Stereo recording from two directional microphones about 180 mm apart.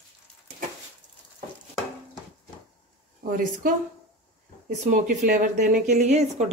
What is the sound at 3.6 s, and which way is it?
Speech, 50° right (ahead or behind).